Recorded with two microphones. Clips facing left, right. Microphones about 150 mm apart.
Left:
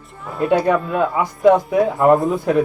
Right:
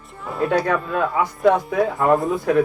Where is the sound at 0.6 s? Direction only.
20° left (ahead or behind).